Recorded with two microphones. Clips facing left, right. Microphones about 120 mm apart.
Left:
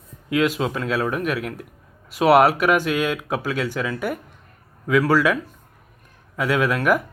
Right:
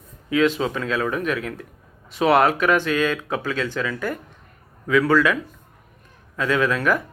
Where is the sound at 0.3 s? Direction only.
10° left (ahead or behind).